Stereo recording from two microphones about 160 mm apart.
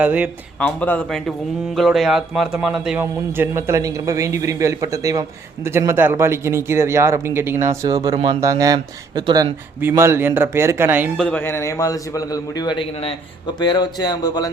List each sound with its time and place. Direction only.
0.0 s speech: 10° right (ahead or behind)
0.6 s speech: 10° left (ahead or behind)
3.0 s a man's voice: 15° right (ahead or behind); by 8.4 s 30° right (ahead or behind)
8.4 s a man's voice: 20° right (ahead or behind)
11.2 s a man's voice: 10° left (ahead or behind)